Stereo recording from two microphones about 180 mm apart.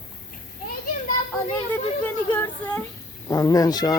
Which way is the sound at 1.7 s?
10° left (ahead or behind).